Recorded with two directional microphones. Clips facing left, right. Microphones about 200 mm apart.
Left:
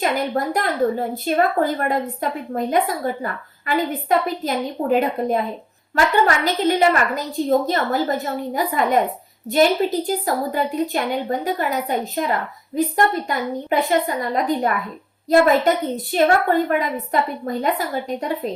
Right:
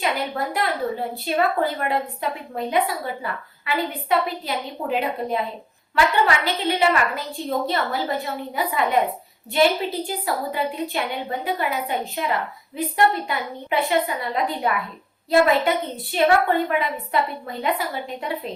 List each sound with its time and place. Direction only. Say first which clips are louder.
0.0 s a woman's voice: left 4 dB; 45° left (ahead or behind)